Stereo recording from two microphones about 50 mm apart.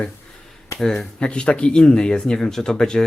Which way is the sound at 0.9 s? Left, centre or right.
Left.